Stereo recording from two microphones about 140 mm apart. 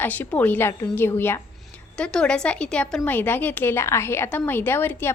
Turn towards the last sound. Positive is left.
turn(degrees=15)  # may be behind; listen again after turning